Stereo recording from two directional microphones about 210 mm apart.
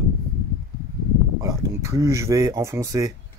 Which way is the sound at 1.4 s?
15° right (ahead or behind).